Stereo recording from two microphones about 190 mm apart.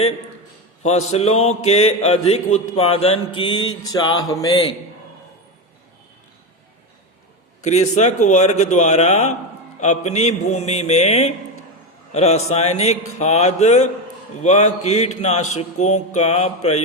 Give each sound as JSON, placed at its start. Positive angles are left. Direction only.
{"t": 0.8, "sound": "mantra", "side_deg": 35}
{"t": 7.6, "sound": "mantra", "side_deg": 35}